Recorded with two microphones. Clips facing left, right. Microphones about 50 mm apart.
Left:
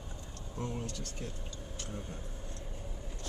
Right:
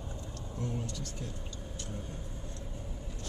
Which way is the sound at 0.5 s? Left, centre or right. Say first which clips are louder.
Right 1 dB; left.